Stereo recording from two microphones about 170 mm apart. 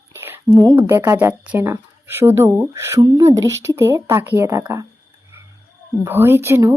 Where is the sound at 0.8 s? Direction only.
15° right (ahead or behind).